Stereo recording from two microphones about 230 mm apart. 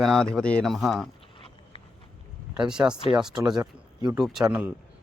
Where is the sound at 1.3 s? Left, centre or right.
Left.